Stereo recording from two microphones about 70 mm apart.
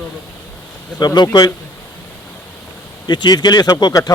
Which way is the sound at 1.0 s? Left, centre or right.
Left.